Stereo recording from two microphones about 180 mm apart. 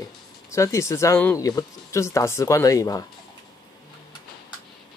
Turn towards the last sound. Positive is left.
turn(degrees=20)  # may be behind; listen again after turning